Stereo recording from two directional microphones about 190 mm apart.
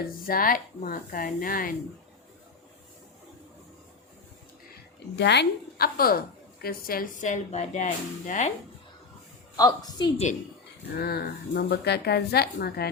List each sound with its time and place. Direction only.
0.3 s a woman's voice: 50° left (ahead or behind)
5.1 s a woman's voice: 65° left (ahead or behind); by 8.5 s 40° left (ahead or behind)
9.6 s a woman's voice: 20° left (ahead or behind)
10.9 s speech: 55° left (ahead or behind)